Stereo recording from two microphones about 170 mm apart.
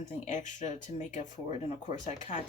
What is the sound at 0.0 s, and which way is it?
Speech, 45° left (ahead or behind).